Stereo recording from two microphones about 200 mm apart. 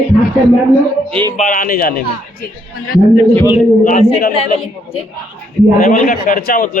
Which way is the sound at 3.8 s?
40° left (ahead or behind).